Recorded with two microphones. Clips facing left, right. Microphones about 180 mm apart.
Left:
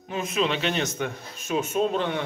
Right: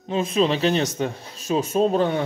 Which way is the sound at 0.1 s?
30° right (ahead or behind).